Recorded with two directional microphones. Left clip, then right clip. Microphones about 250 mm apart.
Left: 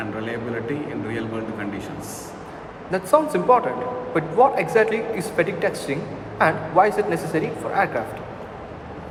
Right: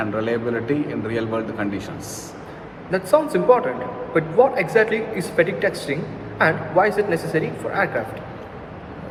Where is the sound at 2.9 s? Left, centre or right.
Centre.